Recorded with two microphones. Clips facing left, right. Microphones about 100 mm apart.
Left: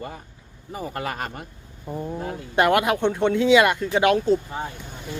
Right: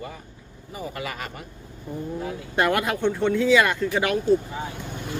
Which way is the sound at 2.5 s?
20° left (ahead or behind).